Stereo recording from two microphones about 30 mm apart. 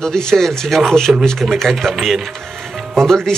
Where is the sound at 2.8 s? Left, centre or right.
Centre.